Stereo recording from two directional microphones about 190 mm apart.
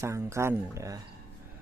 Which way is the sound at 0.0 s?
15° right (ahead or behind).